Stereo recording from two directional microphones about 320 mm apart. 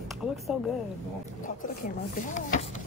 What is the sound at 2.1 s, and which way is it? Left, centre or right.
Chopping, left.